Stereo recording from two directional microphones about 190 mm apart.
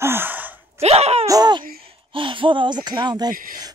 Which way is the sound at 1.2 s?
20° right (ahead or behind).